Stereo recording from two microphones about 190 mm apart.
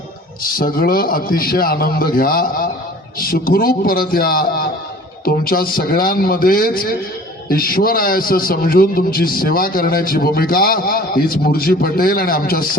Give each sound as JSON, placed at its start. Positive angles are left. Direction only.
{"t": 0.4, "sound": "a man's voice", "side_deg": 50}